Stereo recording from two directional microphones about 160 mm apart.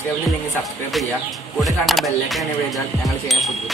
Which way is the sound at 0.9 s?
Centre (ahead or behind).